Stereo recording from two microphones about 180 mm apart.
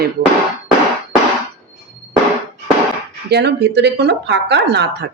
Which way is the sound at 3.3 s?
65° right (ahead or behind).